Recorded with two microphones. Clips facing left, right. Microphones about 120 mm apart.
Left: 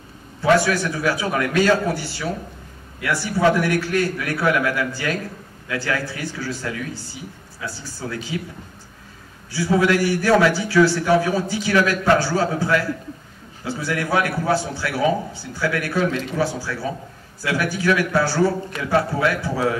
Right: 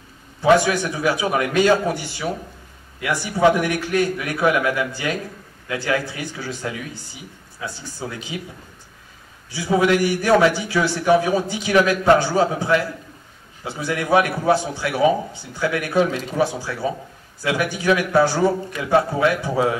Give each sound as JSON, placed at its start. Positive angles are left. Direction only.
{"t": 0.4, "sound": "a man's voice", "side_deg": -20}
{"t": 9.5, "sound": "a man's voice", "side_deg": -20}